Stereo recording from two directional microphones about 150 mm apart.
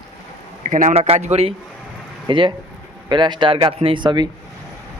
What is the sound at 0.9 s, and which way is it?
Speech, 40° right (ahead or behind).